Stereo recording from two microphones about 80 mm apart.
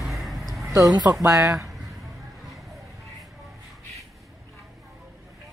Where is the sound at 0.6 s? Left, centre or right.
Right.